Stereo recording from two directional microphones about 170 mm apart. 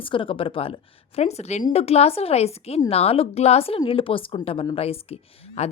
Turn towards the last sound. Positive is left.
turn(degrees=35)  # may be behind; listen again after turning